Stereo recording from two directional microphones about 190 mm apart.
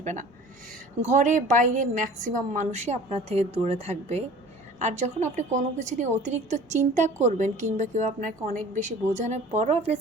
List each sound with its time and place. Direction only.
0.0 s a woman's voice: 40° right (ahead or behind)